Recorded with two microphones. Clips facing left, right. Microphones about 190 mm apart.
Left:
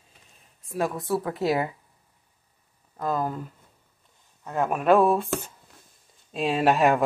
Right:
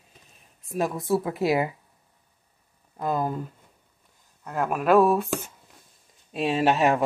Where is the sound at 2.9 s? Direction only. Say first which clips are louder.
Right 1 dB; 10° right (ahead or behind).